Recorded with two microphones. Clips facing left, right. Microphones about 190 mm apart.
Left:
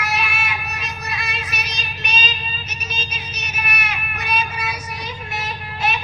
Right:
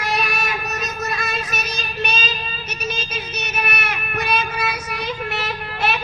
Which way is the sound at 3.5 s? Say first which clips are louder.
Right 2 dB; 55° right (ahead or behind).